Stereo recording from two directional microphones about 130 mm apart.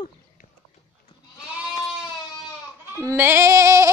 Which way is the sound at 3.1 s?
15° right (ahead or behind).